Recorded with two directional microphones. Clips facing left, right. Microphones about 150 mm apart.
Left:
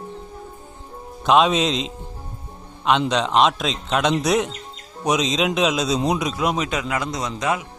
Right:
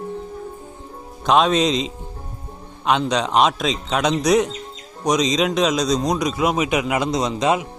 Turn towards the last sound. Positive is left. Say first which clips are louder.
# right 5 dB
turn(degrees=-20)  # may be behind; listen again after turning